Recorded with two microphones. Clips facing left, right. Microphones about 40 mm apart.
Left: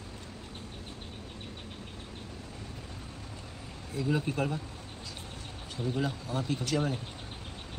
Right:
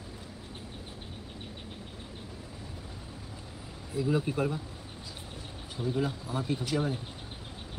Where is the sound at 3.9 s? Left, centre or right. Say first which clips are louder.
Right 2 dB; centre.